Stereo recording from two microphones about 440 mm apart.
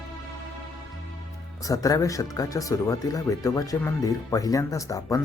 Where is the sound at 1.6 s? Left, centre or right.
Centre.